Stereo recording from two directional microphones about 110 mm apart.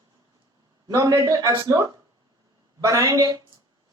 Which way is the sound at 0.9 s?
30° right (ahead or behind).